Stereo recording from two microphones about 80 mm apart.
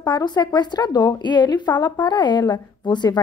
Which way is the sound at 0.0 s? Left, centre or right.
Left.